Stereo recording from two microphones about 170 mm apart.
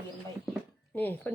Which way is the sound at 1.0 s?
10° left (ahead or behind).